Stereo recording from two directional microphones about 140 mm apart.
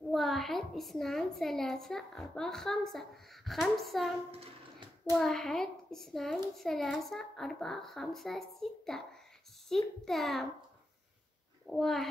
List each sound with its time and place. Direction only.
0.1 s a child's voice: centre (ahead or behind)
4.3 s a sound: 45° right (ahead or behind)
5.1 s a child's voice: 5° left (ahead or behind)
11.6 s a child's voice: centre (ahead or behind)